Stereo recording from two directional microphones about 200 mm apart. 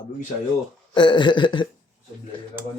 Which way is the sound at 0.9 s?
25° left (ahead or behind).